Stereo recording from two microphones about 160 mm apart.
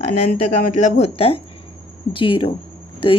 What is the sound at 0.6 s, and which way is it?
Speech, 50° left (ahead or behind).